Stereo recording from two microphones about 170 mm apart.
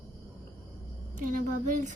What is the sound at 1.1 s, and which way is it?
Speech, 50° right (ahead or behind).